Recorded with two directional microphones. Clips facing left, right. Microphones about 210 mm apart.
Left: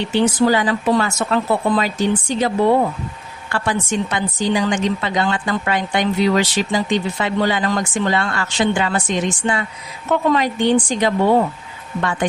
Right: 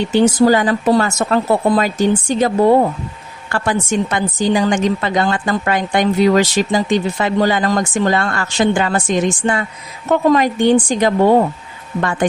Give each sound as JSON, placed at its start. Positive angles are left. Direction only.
{"t": 0.1, "sound": "a woman's voice", "side_deg": -45}